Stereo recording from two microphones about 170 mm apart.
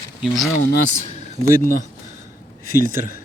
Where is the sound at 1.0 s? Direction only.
40° left (ahead or behind).